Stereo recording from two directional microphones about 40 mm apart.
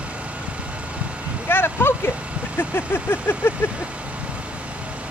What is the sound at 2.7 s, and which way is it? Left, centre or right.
Vehicle, left.